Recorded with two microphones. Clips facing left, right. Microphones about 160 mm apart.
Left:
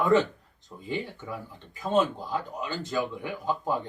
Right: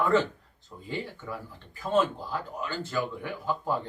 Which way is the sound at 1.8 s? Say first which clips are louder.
Left 1 dB; 20° left (ahead or behind).